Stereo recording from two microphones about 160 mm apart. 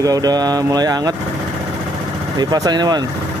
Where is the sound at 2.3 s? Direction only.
25° right (ahead or behind).